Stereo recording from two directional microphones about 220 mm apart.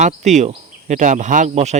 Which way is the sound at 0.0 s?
30° right (ahead or behind).